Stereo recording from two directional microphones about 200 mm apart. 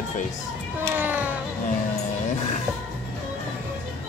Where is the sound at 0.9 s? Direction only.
10° right (ahead or behind).